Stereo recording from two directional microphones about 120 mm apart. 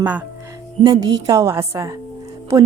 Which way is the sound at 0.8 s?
35° right (ahead or behind).